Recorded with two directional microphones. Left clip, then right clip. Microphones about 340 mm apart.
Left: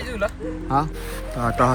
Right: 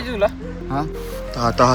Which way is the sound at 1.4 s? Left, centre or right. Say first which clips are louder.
Right 4 dB; centre.